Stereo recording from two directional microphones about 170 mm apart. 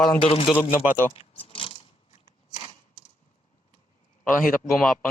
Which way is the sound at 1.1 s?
35° left (ahead or behind).